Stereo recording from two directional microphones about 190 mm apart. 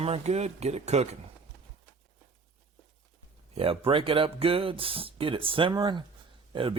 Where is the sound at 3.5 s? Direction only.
30° right (ahead or behind).